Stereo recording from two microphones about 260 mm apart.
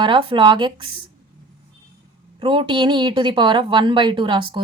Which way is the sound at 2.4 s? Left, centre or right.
Centre.